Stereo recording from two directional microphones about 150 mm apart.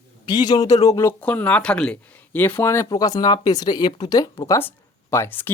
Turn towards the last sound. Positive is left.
turn(degrees=15)  # may be behind; listen again after turning